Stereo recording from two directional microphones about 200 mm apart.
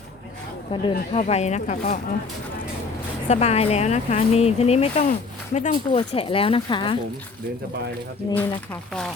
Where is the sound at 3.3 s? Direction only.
30° left (ahead or behind).